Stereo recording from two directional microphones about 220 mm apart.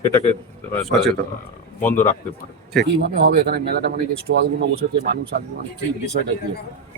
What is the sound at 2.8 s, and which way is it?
Speech, 45° right (ahead or behind).